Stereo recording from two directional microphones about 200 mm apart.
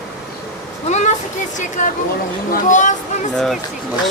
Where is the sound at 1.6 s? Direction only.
40° left (ahead or behind).